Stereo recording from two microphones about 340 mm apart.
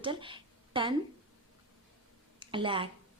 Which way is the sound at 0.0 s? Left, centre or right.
Centre.